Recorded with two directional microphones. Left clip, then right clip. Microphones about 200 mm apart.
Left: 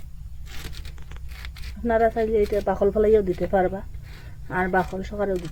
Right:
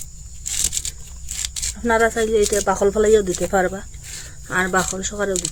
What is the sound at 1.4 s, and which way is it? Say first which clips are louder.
Speech: right 6 dB; 20° right (ahead or behind).